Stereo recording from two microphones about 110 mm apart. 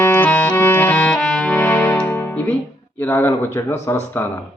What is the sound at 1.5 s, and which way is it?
Music, 20° left (ahead or behind).